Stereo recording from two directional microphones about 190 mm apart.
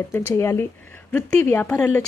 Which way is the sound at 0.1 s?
15° left (ahead or behind).